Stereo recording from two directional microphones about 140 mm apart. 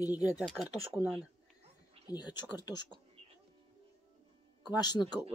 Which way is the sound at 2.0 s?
30° left (ahead or behind).